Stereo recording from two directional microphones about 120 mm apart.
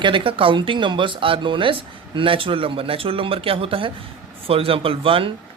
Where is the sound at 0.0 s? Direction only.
45° right (ahead or behind).